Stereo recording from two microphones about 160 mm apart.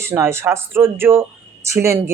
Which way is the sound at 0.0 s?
15° right (ahead or behind).